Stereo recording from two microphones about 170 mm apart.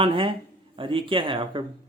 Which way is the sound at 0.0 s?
30° right (ahead or behind).